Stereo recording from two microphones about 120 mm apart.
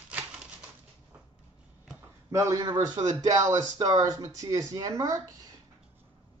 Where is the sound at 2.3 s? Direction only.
25° right (ahead or behind).